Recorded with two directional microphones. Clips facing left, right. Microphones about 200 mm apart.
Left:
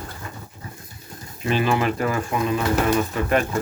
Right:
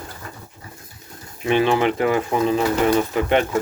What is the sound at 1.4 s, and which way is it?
Speech, 20° right (ahead or behind).